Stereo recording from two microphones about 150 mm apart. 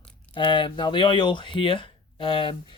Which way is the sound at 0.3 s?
30° left (ahead or behind).